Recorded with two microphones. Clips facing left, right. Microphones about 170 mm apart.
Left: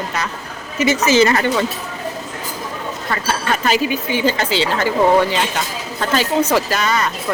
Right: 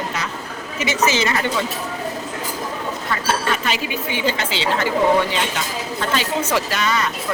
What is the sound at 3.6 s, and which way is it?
A woman's voice, 40° left (ahead or behind).